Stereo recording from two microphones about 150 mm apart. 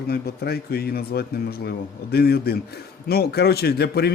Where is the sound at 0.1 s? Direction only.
90° left.